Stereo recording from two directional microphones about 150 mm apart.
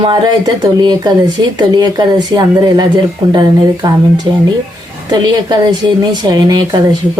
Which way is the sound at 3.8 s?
25° right (ahead or behind).